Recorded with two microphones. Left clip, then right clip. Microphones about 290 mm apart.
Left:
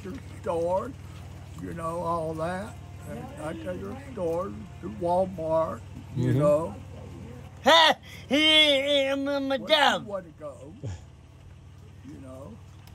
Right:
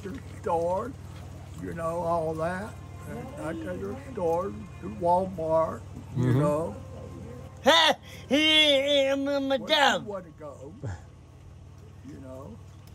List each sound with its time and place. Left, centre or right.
0.0 s speech: centre